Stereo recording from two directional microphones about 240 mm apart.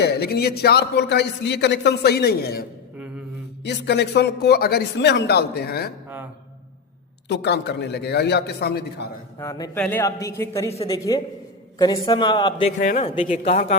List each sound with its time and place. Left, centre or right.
0.0 s a man's voice: left
7.3 s a man's voice: left
9.4 s a man's voice: centre
12.8 s a man's voice: left